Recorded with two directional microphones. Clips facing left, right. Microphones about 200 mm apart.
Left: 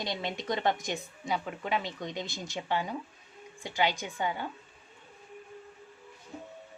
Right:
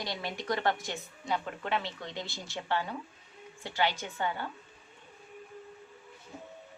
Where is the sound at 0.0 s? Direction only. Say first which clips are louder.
Left 2 dB; 20° left (ahead or behind).